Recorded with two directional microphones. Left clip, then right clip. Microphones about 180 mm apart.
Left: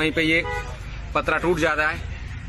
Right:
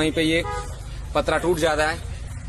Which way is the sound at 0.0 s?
10° right (ahead or behind).